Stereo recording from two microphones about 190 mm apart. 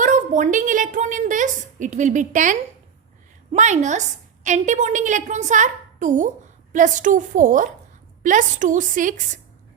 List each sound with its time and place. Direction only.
0.0 s a woman's voice: 40° right (ahead or behind)